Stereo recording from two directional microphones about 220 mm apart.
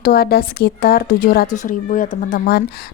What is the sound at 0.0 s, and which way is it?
Speech, 45° left (ahead or behind).